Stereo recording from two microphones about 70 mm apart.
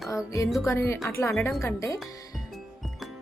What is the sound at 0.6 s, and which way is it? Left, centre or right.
A woman's voice, left.